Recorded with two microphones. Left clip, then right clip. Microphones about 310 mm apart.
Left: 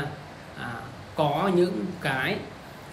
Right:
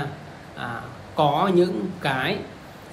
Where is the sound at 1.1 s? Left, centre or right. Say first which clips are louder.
Right 4 dB; centre.